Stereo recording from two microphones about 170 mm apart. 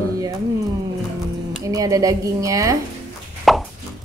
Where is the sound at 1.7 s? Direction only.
20° right (ahead or behind).